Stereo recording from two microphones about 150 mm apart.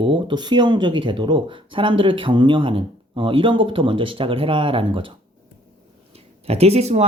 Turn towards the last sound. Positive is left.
turn(degrees=-45)  # may be behind; listen again after turning